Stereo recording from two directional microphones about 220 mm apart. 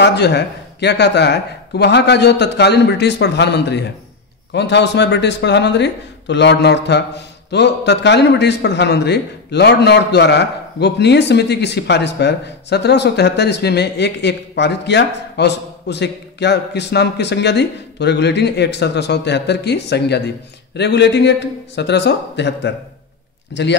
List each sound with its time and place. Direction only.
0.0 s a man's voice: 50° left (ahead or behind)